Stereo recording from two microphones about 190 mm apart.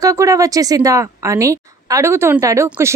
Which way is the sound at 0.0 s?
15° right (ahead or behind).